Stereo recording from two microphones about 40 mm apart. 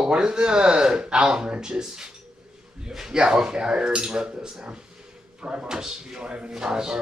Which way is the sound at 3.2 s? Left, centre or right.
Centre.